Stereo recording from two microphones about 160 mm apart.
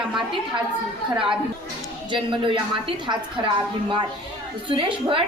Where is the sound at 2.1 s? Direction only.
30° right (ahead or behind).